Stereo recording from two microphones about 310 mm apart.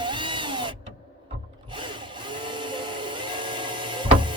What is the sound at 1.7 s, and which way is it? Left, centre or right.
Tools, centre.